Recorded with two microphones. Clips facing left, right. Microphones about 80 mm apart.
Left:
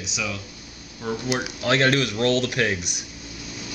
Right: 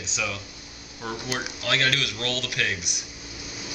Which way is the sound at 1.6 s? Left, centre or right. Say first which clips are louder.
Left 6 dB; left.